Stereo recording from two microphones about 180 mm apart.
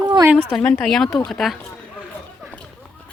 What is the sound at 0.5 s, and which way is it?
Speech, 5° left (ahead or behind).